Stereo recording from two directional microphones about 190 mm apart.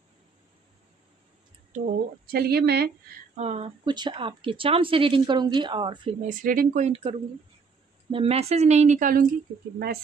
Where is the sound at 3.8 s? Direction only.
25° right (ahead or behind).